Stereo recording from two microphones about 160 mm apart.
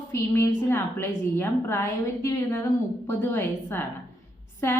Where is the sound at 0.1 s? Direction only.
15° left (ahead or behind).